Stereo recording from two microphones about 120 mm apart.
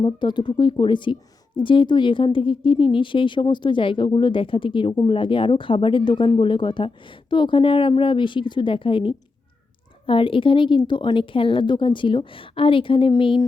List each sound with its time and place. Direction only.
0.0 s a woman's voice: 40° left (ahead or behind)